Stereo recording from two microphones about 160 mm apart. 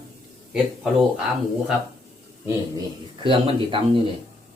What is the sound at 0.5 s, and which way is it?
Speech, 5° right (ahead or behind).